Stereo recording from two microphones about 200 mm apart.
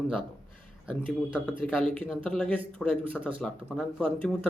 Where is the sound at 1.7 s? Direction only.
5° left (ahead or behind).